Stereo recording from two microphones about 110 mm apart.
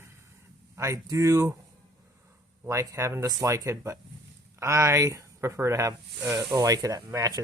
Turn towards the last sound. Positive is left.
turn(degrees=-35)  # may be behind; listen again after turning